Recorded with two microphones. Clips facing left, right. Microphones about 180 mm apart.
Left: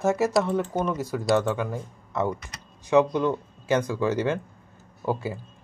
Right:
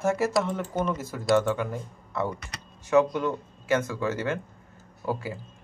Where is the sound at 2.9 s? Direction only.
25° left (ahead or behind).